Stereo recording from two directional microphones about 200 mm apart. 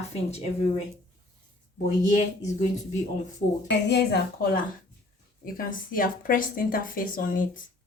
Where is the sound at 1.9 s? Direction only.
35° left (ahead or behind).